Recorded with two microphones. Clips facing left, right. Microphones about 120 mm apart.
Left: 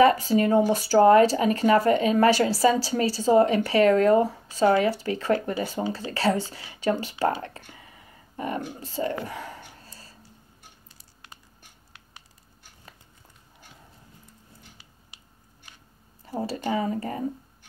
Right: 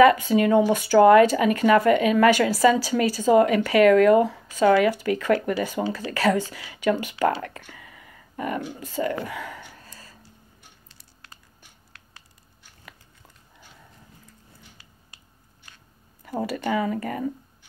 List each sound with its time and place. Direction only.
0.0 s speech: 35° left (ahead or behind)
7.7 s a sound: 30° left (ahead or behind)
16.4 s speech: 30° left (ahead or behind)